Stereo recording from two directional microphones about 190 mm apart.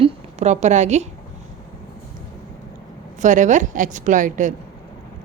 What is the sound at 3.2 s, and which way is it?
A woman's voice, 40° right (ahead or behind).